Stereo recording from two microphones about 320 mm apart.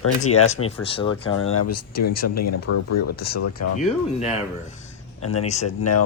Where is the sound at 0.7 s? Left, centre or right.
Centre.